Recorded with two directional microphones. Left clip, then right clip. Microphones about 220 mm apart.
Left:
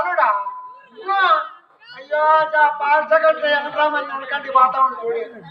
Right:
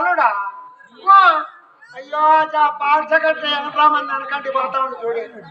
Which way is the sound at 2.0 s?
Centre (ahead or behind).